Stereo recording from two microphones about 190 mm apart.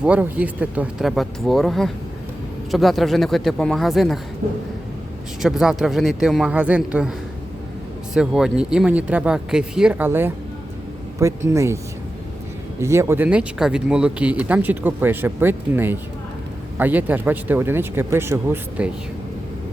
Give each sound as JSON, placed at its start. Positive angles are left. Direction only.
{"t": 0.0, "sound": "speech", "side_deg": -5}
{"t": 4.4, "sound": "a sound", "side_deg": -45}
{"t": 5.4, "sound": "speech", "side_deg": 0}
{"t": 8.1, "sound": "speech", "side_deg": -5}
{"t": 12.8, "sound": "speech", "side_deg": -15}